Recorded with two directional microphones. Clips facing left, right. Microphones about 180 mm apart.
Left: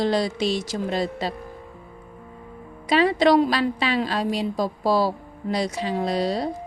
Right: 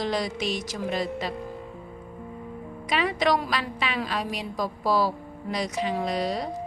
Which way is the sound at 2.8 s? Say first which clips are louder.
Left 6 dB; 30° left (ahead or behind).